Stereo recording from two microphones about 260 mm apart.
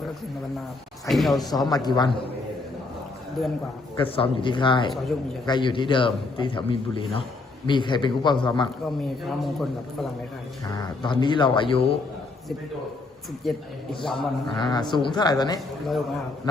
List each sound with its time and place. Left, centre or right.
1.0 s a man's voice: centre
1.7 s speech: centre
3.4 s a man's voice: centre
3.9 s a man's voice: left
9.4 s a man's voice: centre
10.7 s speech: centre
13.5 s a man's voice: centre
14.5 s speech: centre